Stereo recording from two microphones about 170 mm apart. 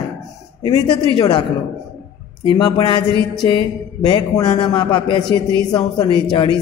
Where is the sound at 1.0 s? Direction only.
30° left (ahead or behind).